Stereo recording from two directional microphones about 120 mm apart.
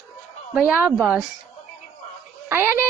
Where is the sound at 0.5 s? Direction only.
10° right (ahead or behind).